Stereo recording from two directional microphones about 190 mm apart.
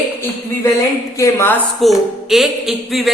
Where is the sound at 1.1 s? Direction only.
15° left (ahead or behind).